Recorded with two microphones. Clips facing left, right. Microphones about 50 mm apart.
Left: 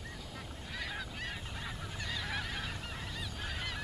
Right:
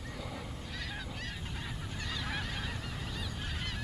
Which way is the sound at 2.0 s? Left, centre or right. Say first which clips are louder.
Even; centre.